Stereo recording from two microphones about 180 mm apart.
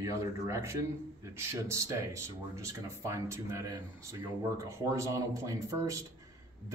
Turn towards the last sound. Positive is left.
turn(degrees=-15)  # may be behind; listen again after turning